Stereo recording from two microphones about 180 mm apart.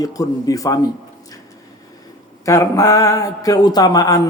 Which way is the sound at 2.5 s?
15° left (ahead or behind).